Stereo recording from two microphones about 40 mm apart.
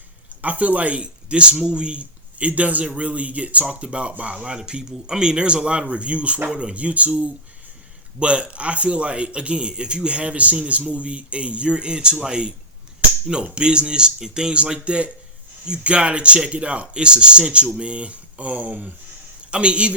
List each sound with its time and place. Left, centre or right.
0.4 s a man's voice: right; by 14.6 s centre
14.6 s speech: right
19.5 s a man's voice: right